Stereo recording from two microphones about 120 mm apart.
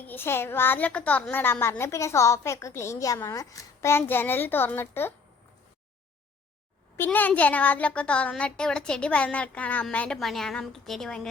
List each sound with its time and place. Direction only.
0.1 s a woman's voice: 20° left (ahead or behind)
6.9 s a child's voice: 15° left (ahead or behind)